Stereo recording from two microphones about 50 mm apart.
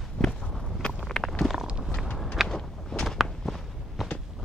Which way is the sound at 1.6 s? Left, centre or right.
Centre.